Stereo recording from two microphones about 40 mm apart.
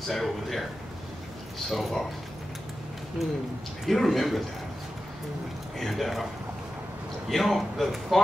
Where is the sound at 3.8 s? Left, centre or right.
Centre.